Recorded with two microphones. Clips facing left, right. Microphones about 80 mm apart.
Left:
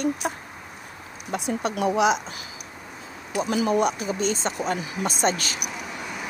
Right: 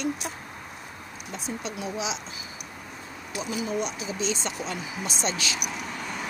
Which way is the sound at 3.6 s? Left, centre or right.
Left.